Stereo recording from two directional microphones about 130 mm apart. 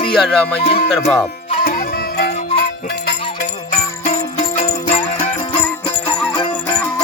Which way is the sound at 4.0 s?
75° left (ahead or behind).